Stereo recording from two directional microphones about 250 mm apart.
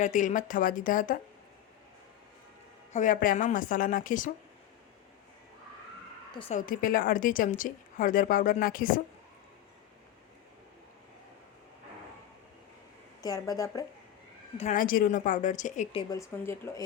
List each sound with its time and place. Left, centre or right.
0.0 s a woman's voice: left
2.9 s a woman's voice: left
6.3 s a woman's voice: left
13.2 s a woman's voice: centre
14.6 s a woman's voice: left; by 16.8 s centre